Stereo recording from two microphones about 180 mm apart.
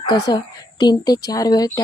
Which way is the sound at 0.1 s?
25° left (ahead or behind).